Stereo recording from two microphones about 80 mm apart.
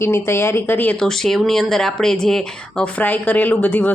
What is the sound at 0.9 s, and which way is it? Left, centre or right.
Speech, centre.